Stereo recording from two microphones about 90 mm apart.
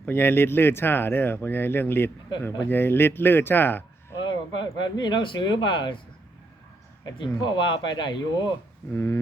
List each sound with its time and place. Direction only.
0.0 s speech: 25° left (ahead or behind)
4.3 s speech: 55° left (ahead or behind)
7.0 s speech: 60° left (ahead or behind)
8.9 s speech: 25° left (ahead or behind)